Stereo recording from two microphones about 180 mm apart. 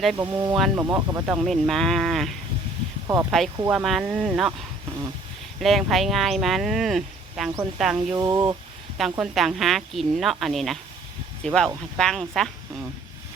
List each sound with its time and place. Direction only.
0.2 s speech: 15° right (ahead or behind)
1.4 s speech: centre (ahead or behind)
3.1 s speech: 15° right (ahead or behind)
3.7 s speech: centre (ahead or behind)
5.5 s speech: centre (ahead or behind)
8.1 s speech: 20° right (ahead or behind)
9.0 s speech: 5° right (ahead or behind)